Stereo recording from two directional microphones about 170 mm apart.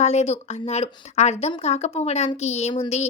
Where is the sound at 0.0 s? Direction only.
40° left (ahead or behind).